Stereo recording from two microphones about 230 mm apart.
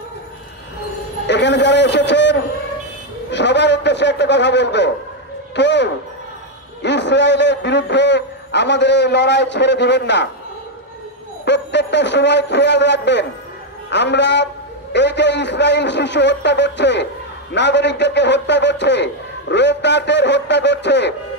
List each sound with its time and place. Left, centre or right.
1.2 s a man's voice: left
3.3 s a sound: left
5.6 s a man's voice: left
11.4 s a man's voice: left